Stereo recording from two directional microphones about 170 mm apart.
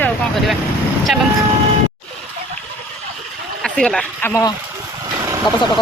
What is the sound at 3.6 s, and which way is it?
Speech, 5° left (ahead or behind).